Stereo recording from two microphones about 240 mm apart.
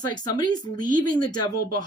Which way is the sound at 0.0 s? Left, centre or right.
Centre.